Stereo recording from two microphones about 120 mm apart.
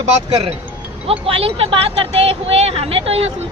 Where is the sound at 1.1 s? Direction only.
50° right (ahead or behind).